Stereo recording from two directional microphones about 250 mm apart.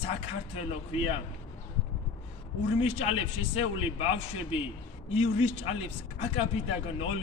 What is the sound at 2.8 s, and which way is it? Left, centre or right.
Speech, left.